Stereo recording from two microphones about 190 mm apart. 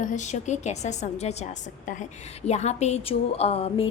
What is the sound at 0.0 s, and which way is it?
A woman's voice, 40° left (ahead or behind).